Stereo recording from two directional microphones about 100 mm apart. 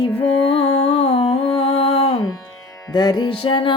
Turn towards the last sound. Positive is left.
turn(degrees=55)  # may be behind; listen again after turning